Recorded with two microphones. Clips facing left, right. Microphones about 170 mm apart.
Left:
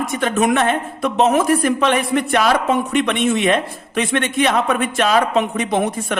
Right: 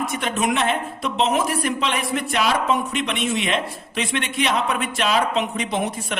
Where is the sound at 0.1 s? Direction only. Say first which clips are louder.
Left 6 dB; 50° left (ahead or behind).